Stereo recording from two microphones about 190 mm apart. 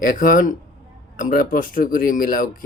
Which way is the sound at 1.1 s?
45° left (ahead or behind).